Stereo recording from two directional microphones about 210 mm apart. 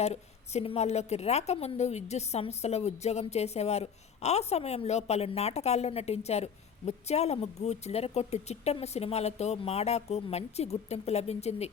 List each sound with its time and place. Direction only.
0.0 s a woman's voice: 30° left (ahead or behind)